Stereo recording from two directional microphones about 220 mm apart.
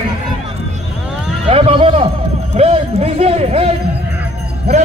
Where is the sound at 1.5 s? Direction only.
25° right (ahead or behind).